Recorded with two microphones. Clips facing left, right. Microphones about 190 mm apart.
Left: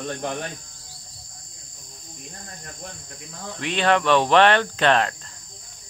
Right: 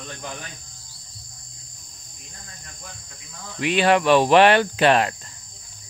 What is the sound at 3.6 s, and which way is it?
Cricket, 5° right (ahead or behind).